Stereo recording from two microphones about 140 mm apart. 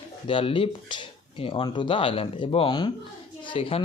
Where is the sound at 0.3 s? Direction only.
40° left (ahead or behind).